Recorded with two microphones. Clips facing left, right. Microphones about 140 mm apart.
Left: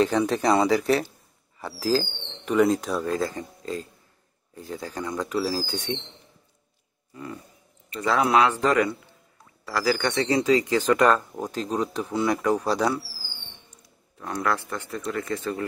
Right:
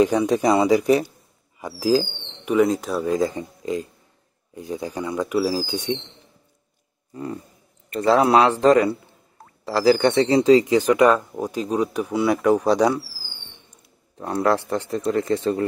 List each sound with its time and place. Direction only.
0.0 s speech: 15° right (ahead or behind)
2.6 s speech: centre (ahead or behind)
3.0 s speech: 15° right (ahead or behind)
8.0 s a man's voice: 35° right (ahead or behind)
10.7 s speech: 10° right (ahead or behind)
14.1 s a man's voice: 30° right (ahead or behind)